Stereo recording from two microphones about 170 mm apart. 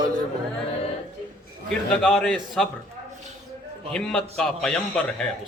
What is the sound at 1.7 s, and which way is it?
A man's voice, centre (ahead or behind).